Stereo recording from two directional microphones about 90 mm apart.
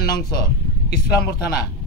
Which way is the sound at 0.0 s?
50° left (ahead or behind).